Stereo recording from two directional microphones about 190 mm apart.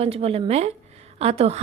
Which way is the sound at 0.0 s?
30° right (ahead or behind).